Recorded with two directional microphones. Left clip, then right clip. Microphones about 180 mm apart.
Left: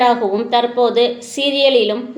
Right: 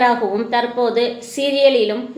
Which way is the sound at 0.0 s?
25° left (ahead or behind).